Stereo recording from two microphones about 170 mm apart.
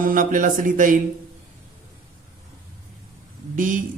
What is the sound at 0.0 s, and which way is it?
Music, 50° right (ahead or behind).